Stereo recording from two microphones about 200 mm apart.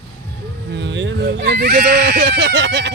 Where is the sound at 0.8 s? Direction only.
60° right (ahead or behind).